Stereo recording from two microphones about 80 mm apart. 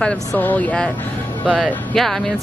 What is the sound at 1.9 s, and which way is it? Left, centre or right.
Speech, centre.